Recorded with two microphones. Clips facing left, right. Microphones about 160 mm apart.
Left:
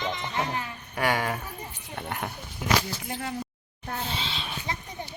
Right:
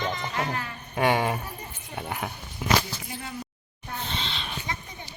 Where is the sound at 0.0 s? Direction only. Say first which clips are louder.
Right 1 dB; centre (ahead or behind).